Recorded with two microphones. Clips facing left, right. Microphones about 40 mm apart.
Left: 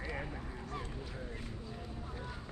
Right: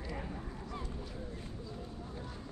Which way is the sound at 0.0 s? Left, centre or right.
Left.